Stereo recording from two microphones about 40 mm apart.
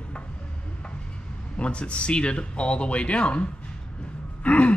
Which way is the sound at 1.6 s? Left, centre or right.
Left.